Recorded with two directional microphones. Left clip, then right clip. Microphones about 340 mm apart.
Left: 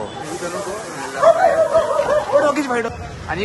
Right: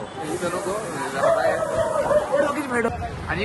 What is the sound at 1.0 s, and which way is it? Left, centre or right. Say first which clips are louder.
Speech: left 8 dB; centre.